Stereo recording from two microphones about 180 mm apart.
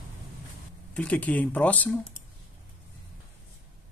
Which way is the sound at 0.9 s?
5° left (ahead or behind).